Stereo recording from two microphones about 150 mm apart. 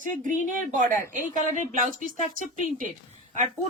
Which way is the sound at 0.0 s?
60° right (ahead or behind).